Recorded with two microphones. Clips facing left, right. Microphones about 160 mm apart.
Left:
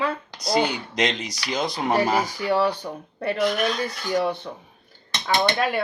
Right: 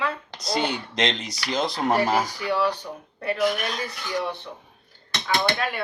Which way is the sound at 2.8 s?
45° left (ahead or behind).